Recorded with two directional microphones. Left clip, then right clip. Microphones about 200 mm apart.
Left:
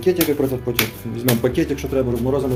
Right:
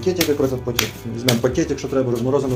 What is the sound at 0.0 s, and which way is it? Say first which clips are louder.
Speech: left 1 dB; 10° left (ahead or behind).